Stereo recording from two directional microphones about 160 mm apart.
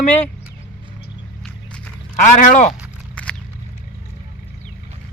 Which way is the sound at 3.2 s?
5° left (ahead or behind).